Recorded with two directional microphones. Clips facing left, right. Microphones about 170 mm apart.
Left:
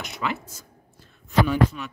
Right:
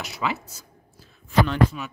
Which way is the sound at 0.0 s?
5° right (ahead or behind).